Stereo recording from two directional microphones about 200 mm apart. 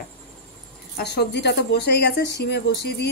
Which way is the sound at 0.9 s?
55° left (ahead or behind).